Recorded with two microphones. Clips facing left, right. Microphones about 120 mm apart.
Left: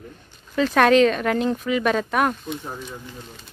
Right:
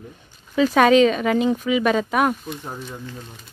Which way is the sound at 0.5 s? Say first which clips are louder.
Right 2 dB; 5° right (ahead or behind).